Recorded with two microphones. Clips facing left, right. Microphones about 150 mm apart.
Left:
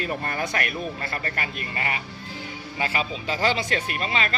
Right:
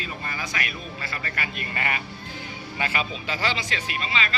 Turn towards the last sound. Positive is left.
turn(degrees=50)  # may be behind; listen again after turning